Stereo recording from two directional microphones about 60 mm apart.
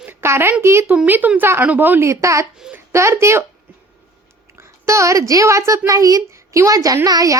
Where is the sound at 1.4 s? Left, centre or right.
Right.